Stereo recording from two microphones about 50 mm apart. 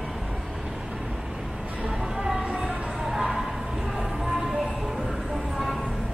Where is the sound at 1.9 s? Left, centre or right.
Centre.